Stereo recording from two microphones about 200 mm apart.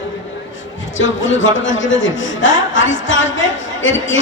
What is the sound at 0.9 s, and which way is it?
A man's voice, 70° left (ahead or behind).